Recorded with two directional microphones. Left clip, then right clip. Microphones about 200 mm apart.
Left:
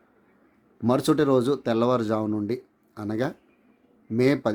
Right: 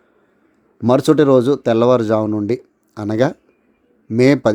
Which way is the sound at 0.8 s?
30° right (ahead or behind).